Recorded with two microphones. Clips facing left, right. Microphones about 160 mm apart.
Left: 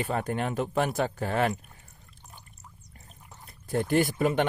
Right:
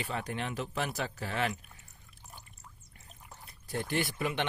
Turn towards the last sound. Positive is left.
turn(degrees=45)  # may be behind; listen again after turning